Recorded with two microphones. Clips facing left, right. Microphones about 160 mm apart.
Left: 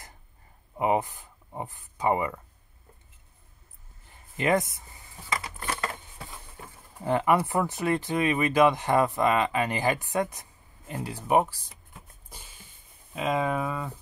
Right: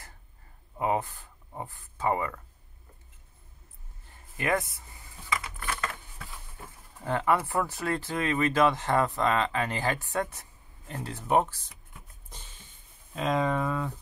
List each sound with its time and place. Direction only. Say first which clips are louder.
0.7 s speech: left 3 dB; 20° left (ahead or behind)
4.4 s speech: left 4 dB; 20° left (ahead or behind)
5.7 s a sound: left 2 dB; 35° left (ahead or behind)
7.0 s speech: left 3 dB; 15° left (ahead or behind)
12.3 s a sound: right 1 dB; 10° left (ahead or behind)
13.1 s speech: even; 5° left (ahead or behind)